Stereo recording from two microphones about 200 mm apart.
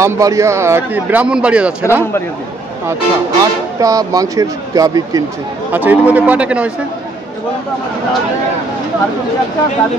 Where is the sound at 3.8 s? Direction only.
15° right (ahead or behind).